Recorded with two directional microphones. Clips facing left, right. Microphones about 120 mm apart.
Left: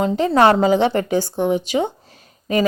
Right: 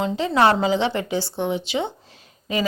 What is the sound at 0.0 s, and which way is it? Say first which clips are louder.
A woman's voice: left 4 dB; 45° left (ahead or behind).